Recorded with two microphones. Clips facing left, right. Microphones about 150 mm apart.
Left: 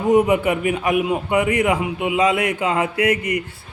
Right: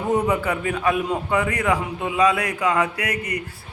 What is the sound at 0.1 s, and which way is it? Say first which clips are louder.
A man's voice: left 6 dB; 20° left (ahead or behind).